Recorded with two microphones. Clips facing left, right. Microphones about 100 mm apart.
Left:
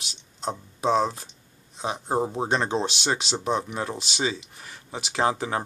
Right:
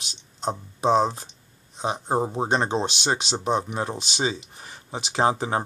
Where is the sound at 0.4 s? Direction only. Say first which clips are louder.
Right 3 dB; 25° right (ahead or behind).